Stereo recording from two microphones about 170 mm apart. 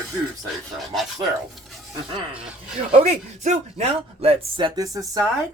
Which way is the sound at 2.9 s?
40° right (ahead or behind).